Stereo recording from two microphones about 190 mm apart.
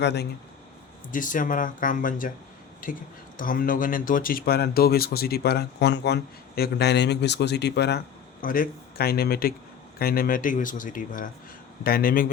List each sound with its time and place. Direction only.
0.0 s speech: 60° left (ahead or behind)
1.1 s speech: 45° left (ahead or behind)
3.3 s speech: 50° left (ahead or behind)